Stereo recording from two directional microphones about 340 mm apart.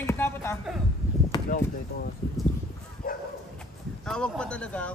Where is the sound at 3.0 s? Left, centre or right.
Left.